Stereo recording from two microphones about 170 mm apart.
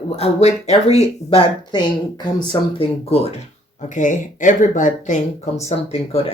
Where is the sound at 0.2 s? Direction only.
40° left (ahead or behind).